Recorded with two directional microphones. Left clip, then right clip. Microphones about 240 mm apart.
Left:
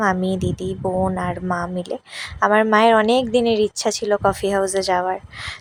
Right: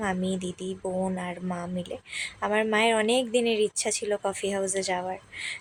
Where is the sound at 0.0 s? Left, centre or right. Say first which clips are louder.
Left 10 dB; centre.